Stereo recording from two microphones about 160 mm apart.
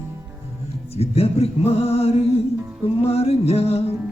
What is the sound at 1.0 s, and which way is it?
Music, 40° left (ahead or behind).